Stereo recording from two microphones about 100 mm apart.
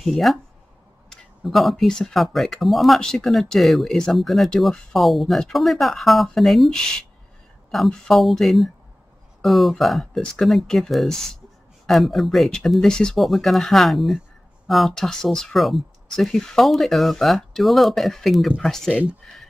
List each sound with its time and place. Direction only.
0.0 s speech: centre (ahead or behind)